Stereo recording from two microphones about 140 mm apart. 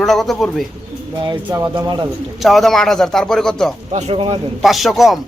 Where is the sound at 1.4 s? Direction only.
25° right (ahead or behind).